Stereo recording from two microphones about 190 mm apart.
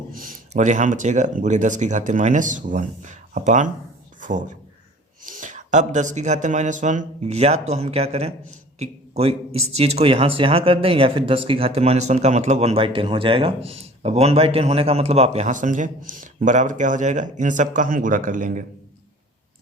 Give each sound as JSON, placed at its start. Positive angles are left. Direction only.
{"t": 0.1, "sound": "speech", "side_deg": -45}
{"t": 4.2, "sound": "a sound", "side_deg": -40}
{"t": 5.2, "sound": "speech", "side_deg": -45}